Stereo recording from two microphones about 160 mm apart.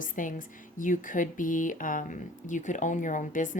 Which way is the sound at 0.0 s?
55° left (ahead or behind).